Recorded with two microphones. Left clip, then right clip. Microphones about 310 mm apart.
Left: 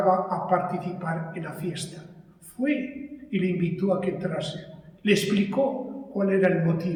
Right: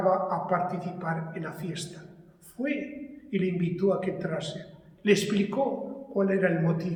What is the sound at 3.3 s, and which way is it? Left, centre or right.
A man's voice, centre.